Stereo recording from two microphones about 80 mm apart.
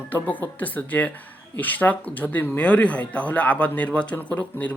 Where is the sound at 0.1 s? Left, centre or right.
Left.